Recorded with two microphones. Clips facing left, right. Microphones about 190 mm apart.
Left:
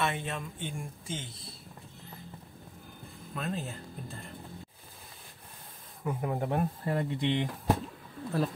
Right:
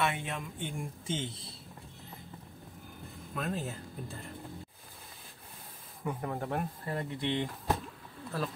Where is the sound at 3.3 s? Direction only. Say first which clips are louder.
Even; 5° right (ahead or behind).